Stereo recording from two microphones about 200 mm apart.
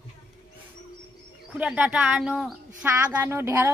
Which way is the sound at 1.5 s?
5° right (ahead or behind).